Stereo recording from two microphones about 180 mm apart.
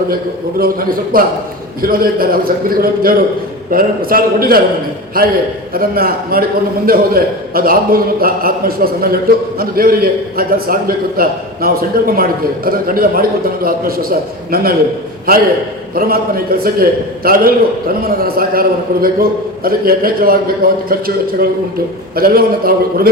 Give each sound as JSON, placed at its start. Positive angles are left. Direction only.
{"t": 0.6, "sound": "a man's voice", "side_deg": -55}
{"t": 19.6, "sound": "a man's voice", "side_deg": -55}
{"t": 22.1, "sound": "a man's voice", "side_deg": -55}